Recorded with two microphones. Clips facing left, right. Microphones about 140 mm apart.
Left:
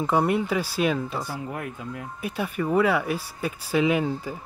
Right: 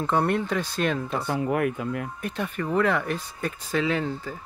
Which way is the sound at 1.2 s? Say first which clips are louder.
Right 8 dB; 65° right (ahead or behind).